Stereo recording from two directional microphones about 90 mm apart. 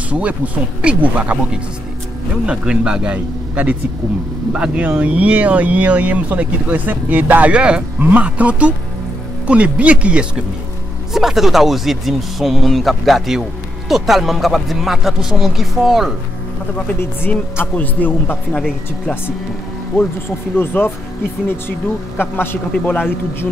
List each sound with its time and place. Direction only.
0.1 s speech: 15° right (ahead or behind)
11.1 s speech: 5° right (ahead or behind)
17.0 s speech: 25° left (ahead or behind)
20.5 s speech: 25° left (ahead or behind)